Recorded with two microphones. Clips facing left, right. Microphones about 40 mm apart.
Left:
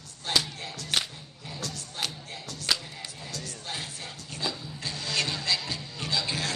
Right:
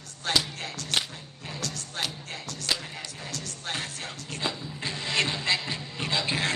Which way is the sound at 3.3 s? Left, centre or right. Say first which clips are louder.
Right 3 dB; right.